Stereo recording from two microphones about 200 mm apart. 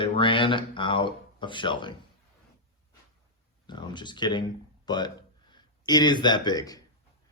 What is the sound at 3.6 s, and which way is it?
Speech, 20° left (ahead or behind).